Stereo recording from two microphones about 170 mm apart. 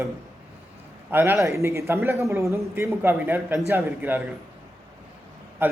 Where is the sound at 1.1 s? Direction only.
10° right (ahead or behind).